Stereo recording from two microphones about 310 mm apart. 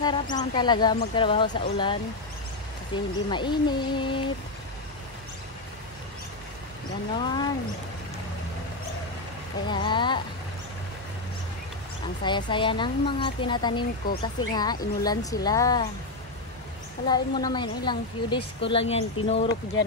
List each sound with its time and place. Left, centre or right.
0.0 s a woman's voice: centre
7.2 s a woman's voice: centre
9.7 s a woman's voice: centre
12.2 s a woman's voice: centre
17.1 s a woman's voice: centre